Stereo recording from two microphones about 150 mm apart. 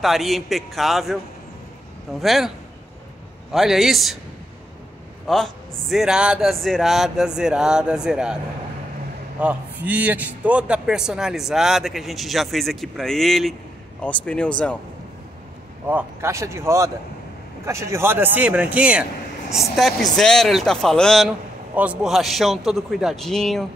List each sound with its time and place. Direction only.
0.0 s a man's voice: centre (ahead or behind)
3.5 s a man's voice: centre (ahead or behind)
5.2 s a man's voice: centre (ahead or behind)
9.4 s a man's voice: 10° right (ahead or behind); by 14.5 s 5° left (ahead or behind)
15.9 s speech: 15° right (ahead or behind)
19.8 s a man's voice: centre (ahead or behind)